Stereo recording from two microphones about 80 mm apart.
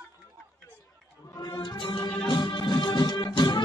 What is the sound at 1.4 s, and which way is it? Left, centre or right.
Music, left.